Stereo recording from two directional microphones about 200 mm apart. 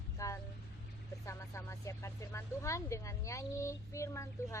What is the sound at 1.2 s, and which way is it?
Speech, 15° left (ahead or behind).